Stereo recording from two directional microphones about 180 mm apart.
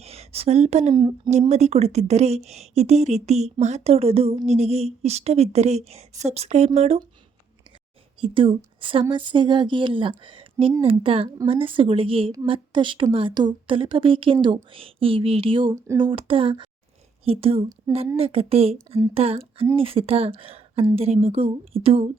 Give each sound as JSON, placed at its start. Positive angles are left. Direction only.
{"t": 0.0, "sound": "a woman's voice", "side_deg": -35}
{"t": 1.3, "sound": "speech", "side_deg": -40}
{"t": 8.2, "sound": "a woman's voice", "side_deg": -30}